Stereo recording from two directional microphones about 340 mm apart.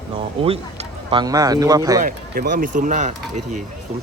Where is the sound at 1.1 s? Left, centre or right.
Centre.